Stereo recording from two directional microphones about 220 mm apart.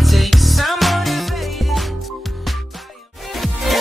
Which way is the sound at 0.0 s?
Centre (ahead or behind).